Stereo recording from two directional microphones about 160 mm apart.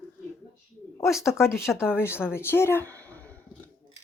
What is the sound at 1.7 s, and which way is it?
A woman's voice, 15° left (ahead or behind).